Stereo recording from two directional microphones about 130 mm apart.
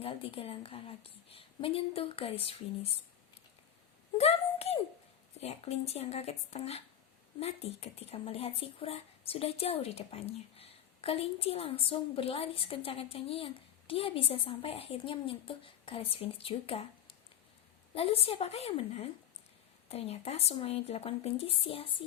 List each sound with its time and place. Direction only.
0.0 s speech: 45° left (ahead or behind)
4.2 s a sound: 50° left (ahead or behind)
5.4 s speech: 55° left (ahead or behind)